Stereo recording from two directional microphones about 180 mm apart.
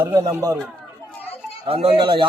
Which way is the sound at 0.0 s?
15° right (ahead or behind).